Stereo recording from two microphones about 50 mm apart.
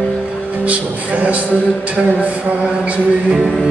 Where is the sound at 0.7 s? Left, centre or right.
Right.